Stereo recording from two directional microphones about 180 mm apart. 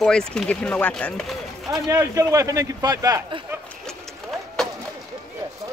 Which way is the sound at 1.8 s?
15° right (ahead or behind).